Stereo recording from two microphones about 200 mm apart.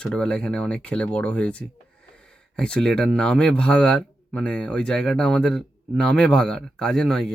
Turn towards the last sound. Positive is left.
turn(degrees=0)  # may be behind; listen again after turning